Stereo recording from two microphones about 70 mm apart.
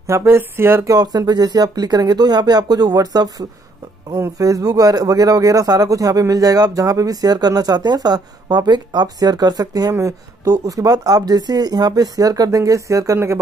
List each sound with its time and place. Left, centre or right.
0.0 s speech: right
0.8 s speech: right
4.1 s speech: right
9.9 s speech: right